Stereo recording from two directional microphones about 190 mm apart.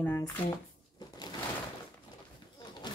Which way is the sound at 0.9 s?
20° left (ahead or behind).